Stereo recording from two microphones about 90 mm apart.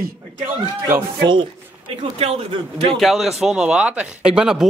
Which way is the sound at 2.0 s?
90° right.